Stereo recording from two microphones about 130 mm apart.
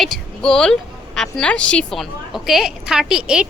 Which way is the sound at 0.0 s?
5° left (ahead or behind).